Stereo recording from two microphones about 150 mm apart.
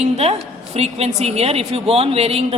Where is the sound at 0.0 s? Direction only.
45° right (ahead or behind).